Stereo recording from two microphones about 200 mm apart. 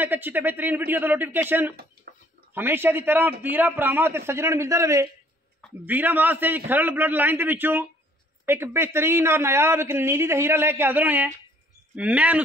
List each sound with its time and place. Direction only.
0.0 s a man's voice: 10° right (ahead or behind)
2.1 s a sound: 50° right (ahead or behind)
2.5 s a man's voice: 10° right (ahead or behind)